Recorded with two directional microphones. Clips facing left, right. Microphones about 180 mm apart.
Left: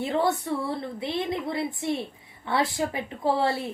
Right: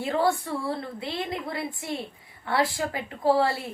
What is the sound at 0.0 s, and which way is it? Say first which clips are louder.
A woman's voice: even; 20° left (ahead or behind).